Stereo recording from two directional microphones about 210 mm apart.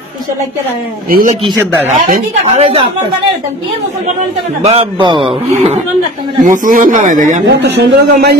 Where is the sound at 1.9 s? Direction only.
35° right (ahead or behind).